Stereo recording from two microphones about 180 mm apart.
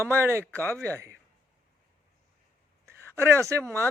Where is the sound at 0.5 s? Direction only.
10° left (ahead or behind).